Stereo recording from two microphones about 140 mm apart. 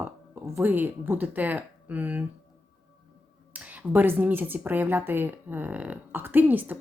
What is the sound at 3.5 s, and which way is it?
A woman's voice, 10° right (ahead or behind).